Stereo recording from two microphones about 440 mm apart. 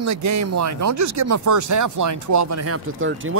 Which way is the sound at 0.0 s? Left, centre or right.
Right.